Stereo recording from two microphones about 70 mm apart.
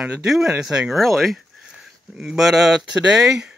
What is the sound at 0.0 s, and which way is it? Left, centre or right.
Speech, centre.